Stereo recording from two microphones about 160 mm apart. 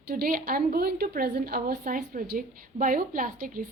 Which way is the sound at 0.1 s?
65° right (ahead or behind).